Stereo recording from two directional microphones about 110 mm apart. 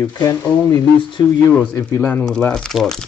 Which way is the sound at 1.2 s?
35° left (ahead or behind).